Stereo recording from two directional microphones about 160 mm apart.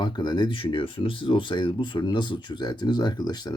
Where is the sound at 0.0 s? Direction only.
25° left (ahead or behind).